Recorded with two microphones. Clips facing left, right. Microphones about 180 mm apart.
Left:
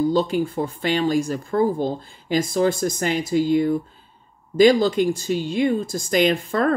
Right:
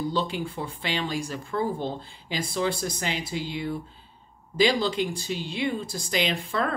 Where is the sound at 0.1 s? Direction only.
45° left (ahead or behind).